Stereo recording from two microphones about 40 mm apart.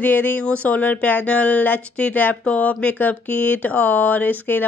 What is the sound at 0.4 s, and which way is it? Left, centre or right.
Speech, left.